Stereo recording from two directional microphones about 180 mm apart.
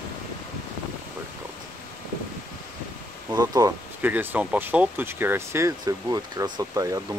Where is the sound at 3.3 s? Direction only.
20° right (ahead or behind).